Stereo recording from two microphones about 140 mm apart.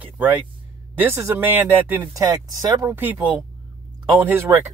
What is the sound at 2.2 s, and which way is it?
Speech, 25° right (ahead or behind).